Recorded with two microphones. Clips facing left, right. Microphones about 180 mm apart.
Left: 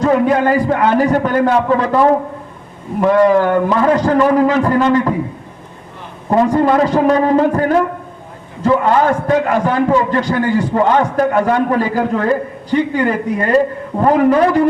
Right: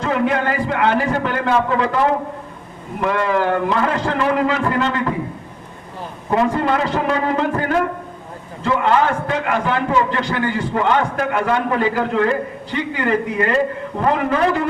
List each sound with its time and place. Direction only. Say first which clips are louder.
0.0 s a man's voice: left 6 dB; 40° left (ahead or behind)
6.3 s a man's voice: left 5 dB; 40° left (ahead or behind)
8.6 s a man's voice: left 4 dB; 40° left (ahead or behind)